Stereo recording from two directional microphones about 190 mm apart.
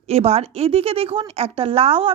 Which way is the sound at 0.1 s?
35° right (ahead or behind).